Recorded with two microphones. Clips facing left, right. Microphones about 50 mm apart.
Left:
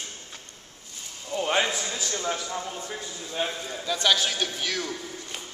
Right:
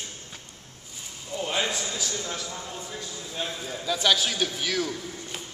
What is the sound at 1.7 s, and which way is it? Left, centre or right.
Speech, centre.